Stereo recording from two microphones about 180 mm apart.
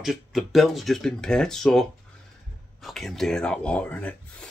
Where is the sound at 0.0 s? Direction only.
Centre (ahead or behind).